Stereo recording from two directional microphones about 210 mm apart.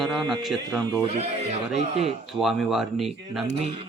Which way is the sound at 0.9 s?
25° right (ahead or behind).